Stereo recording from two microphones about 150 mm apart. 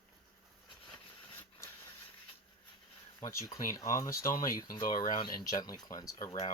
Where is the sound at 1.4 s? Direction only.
20° left (ahead or behind).